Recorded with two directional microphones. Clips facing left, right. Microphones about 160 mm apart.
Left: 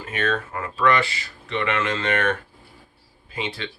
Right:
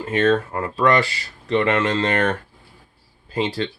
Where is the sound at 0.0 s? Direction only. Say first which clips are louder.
Right 7 dB; 30° right (ahead or behind).